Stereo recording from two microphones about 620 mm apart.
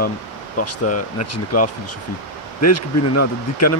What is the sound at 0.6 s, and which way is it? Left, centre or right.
Speech, left.